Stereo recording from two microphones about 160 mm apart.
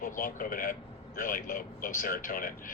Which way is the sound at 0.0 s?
60° left (ahead or behind).